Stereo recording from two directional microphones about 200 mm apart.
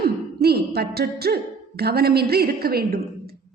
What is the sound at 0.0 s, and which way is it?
A woman's voice, 50° right (ahead or behind).